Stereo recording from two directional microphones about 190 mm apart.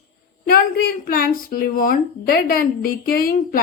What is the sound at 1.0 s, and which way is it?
A woman's voice, 50° left (ahead or behind).